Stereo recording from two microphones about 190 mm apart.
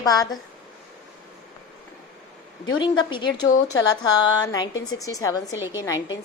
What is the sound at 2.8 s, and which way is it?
A woman's voice, 25° left (ahead or behind).